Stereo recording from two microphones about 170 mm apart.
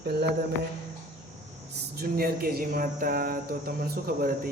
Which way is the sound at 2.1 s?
60° right (ahead or behind).